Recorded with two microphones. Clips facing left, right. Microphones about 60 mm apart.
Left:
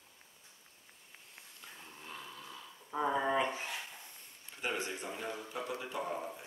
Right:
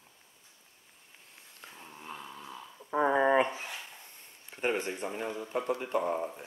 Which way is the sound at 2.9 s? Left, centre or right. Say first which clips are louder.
Right 7 dB; right.